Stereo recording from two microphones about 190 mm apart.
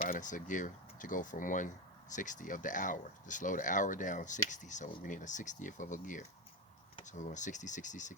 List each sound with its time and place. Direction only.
0.0 s speech: 45° left (ahead or behind)